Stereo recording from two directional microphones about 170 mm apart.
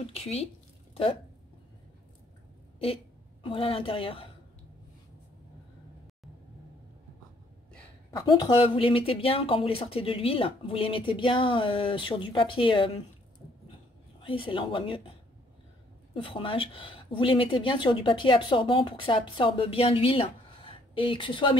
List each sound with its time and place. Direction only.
0.0 s speech: 35° left (ahead or behind)
3.4 s speech: 30° left (ahead or behind)
8.3 s speech: 25° left (ahead or behind)
14.2 s speech: 30° left (ahead or behind)
16.2 s speech: 30° left (ahead or behind)